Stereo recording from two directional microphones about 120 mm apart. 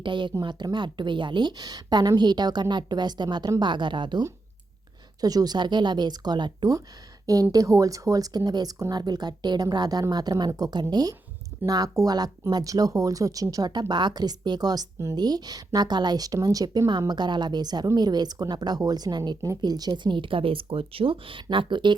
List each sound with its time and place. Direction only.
0.0 s speech: 40° right (ahead or behind)